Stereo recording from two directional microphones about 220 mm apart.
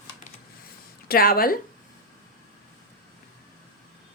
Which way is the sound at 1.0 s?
40° left (ahead or behind).